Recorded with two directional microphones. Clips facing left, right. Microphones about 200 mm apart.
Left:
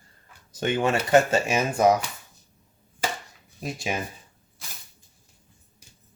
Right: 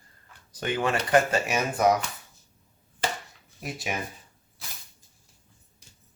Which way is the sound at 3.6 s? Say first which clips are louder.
Left 3 dB; 25° left (ahead or behind).